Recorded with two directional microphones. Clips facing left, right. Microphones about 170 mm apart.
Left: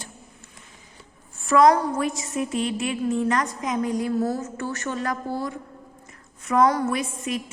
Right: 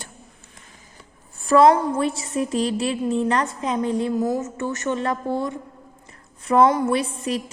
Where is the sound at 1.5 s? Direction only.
30° right (ahead or behind).